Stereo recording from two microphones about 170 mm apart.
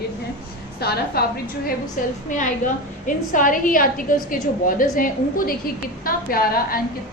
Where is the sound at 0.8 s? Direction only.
70° left (ahead or behind).